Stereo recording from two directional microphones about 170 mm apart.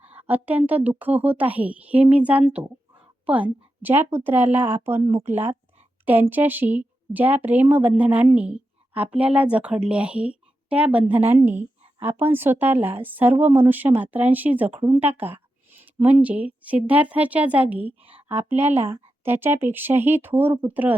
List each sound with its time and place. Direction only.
0.0 s speech: 10° right (ahead or behind)
5.0 s speech: 40° right (ahead or behind)
6.1 s speech: 10° right (ahead or behind)
18.0 s a woman's voice: 35° right (ahead or behind)
18.3 s speech: 15° right (ahead or behind)